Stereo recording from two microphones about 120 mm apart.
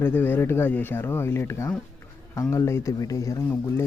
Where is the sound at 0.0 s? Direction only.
20° left (ahead or behind).